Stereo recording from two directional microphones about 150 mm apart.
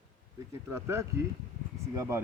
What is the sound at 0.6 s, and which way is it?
Speech, 20° right (ahead or behind).